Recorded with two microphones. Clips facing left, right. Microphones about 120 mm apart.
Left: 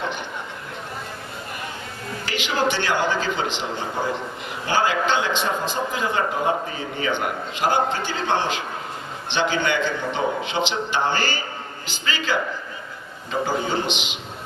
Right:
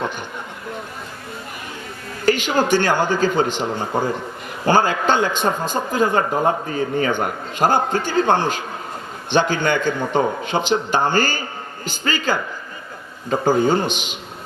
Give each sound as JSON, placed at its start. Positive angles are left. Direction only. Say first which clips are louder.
{"t": 2.2, "sound": "speech", "louder": "right 6 dB", "side_deg": -45}
{"t": 13.4, "sound": "speech", "louder": "right 7 dB", "side_deg": -45}